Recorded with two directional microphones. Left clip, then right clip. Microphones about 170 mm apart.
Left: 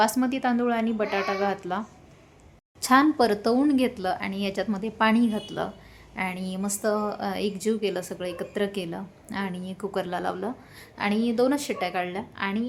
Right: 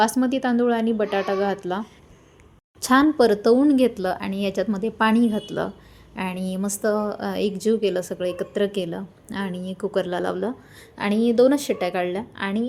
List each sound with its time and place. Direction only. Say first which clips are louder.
0.0 s a woman's voice: right 3 dB; 20° right (ahead or behind)
2.8 s a woman's voice: right 3 dB; 20° right (ahead or behind)